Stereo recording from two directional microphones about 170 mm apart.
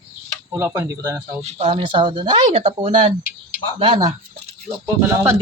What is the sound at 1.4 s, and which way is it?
Speech, 35° right (ahead or behind).